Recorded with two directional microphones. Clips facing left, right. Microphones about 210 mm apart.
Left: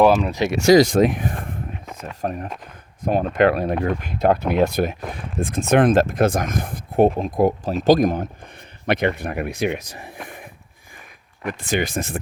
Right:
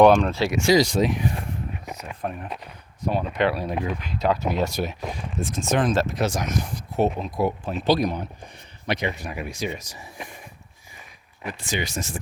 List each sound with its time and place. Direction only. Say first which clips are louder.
0.0 s speech: right 1 dB; 5° left (ahead or behind)
0.3 s speech: left 2 dB; 15° left (ahead or behind)
0.6 s speech: left 6 dB; 50° left (ahead or behind)